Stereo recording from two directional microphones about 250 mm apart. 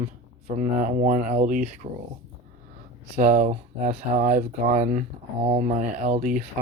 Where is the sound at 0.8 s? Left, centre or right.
Right.